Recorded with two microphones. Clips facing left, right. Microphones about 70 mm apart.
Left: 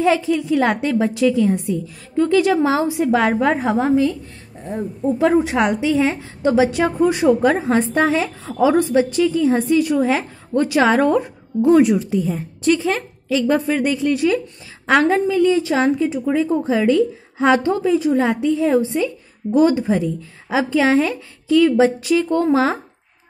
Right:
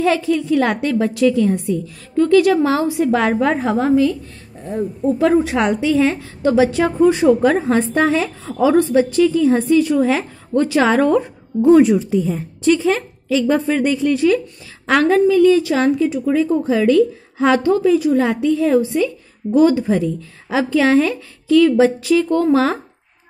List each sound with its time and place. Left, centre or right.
0.0 s a woman's voice: centre